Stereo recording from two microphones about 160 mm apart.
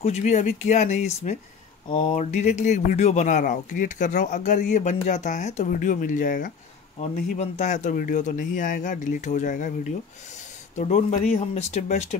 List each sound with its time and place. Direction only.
0.0 s speech: 45° left (ahead or behind)
1.9 s speech: 35° left (ahead or behind)